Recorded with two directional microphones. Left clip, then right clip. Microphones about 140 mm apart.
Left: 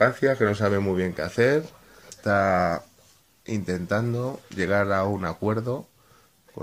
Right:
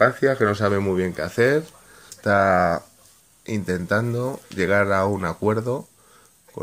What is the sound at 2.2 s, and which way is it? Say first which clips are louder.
Speech: right 4 dB; 25° right (ahead or behind).